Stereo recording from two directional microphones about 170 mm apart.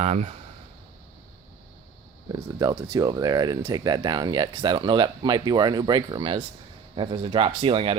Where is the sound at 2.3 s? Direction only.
20° right (ahead or behind).